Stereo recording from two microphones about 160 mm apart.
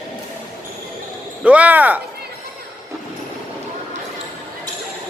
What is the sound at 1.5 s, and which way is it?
Speech, 10° right (ahead or behind).